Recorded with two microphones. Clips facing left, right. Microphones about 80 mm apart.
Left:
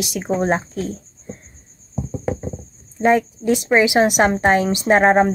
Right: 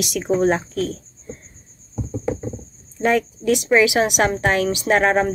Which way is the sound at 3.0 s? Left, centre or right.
Left.